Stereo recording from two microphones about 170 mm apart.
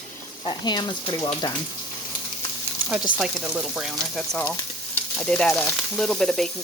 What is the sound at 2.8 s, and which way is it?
Sizzle, 5° right (ahead or behind).